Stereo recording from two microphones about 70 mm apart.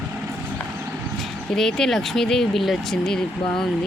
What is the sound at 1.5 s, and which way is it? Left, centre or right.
Speech, centre.